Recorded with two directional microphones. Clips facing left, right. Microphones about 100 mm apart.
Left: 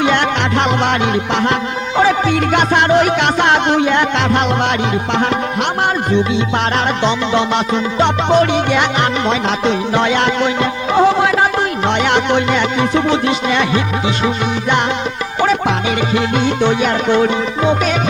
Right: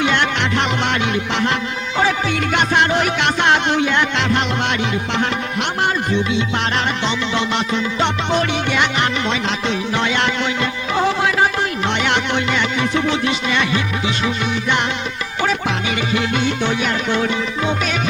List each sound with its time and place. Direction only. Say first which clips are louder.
0.0 s music: left 4 dB; 40° left (ahead or behind)
7.0 s music: left 5 dB; 45° left (ahead or behind)
15.4 s music: left 5 dB; 45° left (ahead or behind)